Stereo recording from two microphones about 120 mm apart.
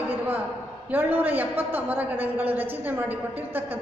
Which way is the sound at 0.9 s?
15° right (ahead or behind).